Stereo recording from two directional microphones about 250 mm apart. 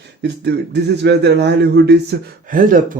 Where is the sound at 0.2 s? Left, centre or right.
Right.